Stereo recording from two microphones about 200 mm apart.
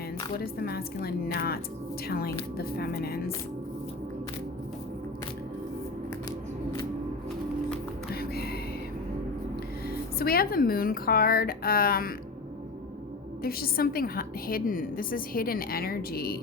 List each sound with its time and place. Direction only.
0.3 s a woman's voice: 50° left (ahead or behind)
8.1 s a sound: 50° left (ahead or behind)
9.9 s a woman's voice: 50° left (ahead or behind)
13.4 s a woman's voice: 50° left (ahead or behind)